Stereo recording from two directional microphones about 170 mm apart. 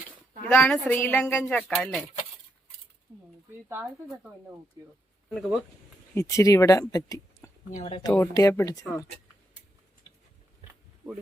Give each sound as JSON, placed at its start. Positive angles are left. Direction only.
{"t": 0.4, "sound": "speech", "side_deg": 10}
{"t": 3.7, "sound": "speech", "side_deg": -10}
{"t": 5.3, "sound": "speech", "side_deg": 0}
{"t": 6.1, "sound": "speech", "side_deg": 20}
{"t": 7.8, "sound": "speech", "side_deg": 35}
{"t": 8.2, "sound": "speech", "side_deg": 20}